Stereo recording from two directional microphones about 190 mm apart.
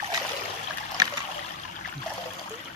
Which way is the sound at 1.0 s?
20° right (ahead or behind).